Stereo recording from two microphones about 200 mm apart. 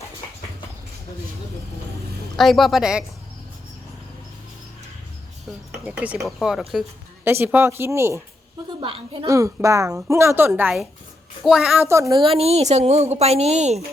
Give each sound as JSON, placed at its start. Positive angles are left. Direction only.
{"t": 2.3, "sound": "speech", "side_deg": 0}
{"t": 5.8, "sound": "a woman's voice", "side_deg": -5}
{"t": 8.8, "sound": "a woman's voice", "side_deg": -25}
{"t": 9.2, "sound": "a woman's voice", "side_deg": -15}
{"t": 11.9, "sound": "a woman's voice", "side_deg": -15}
{"t": 12.2, "sound": "a woman's voice", "side_deg": -30}